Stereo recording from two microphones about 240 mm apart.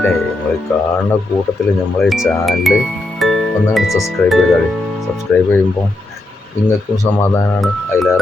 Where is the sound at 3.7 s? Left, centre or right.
Centre.